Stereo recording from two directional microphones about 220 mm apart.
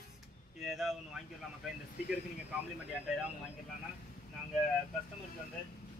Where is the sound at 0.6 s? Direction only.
Centre (ahead or behind).